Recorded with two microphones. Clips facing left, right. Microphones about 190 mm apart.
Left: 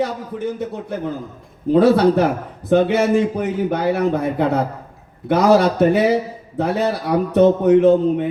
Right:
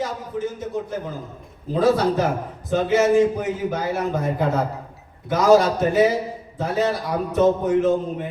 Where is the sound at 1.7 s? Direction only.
65° left (ahead or behind).